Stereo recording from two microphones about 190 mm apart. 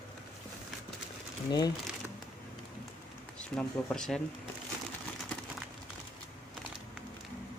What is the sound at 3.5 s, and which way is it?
Speech, 5° left (ahead or behind).